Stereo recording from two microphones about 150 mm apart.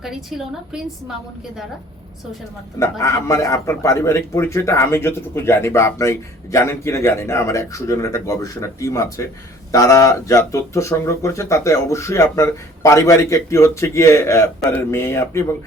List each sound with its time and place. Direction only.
0.0 s a woman's voice: centre (ahead or behind)
3.0 s a man's voice: 20° left (ahead or behind)